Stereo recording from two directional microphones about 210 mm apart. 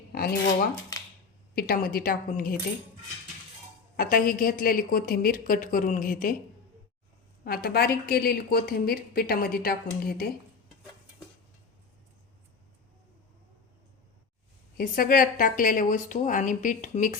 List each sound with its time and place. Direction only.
0.1 s cutlery: 45° left (ahead or behind)
1.5 s a woman's voice: 45° left (ahead or behind)
3.9 s a woman's voice: 40° left (ahead or behind)
7.4 s a woman's voice: 45° left (ahead or behind)
14.8 s a woman's voice: 40° left (ahead or behind)